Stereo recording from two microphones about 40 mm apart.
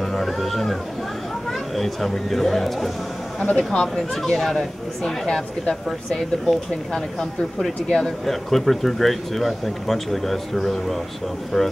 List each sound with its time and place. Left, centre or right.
0.0 s a sound: centre
1.5 s speech: centre
3.3 s speech: left
4.1 s speech: centre
5.0 s speech: centre
5.9 s speech: centre
6.9 s speech: centre